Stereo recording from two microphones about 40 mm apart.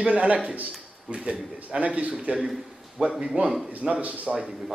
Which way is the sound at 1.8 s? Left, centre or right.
Right.